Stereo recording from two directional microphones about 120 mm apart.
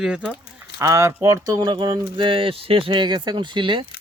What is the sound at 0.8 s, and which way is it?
Speech, 25° right (ahead or behind).